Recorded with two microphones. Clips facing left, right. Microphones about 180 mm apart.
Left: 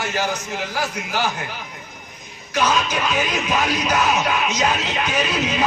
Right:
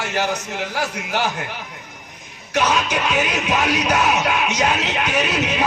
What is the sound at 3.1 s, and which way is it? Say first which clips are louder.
Speech: right 1 dB; 65° right (ahead or behind).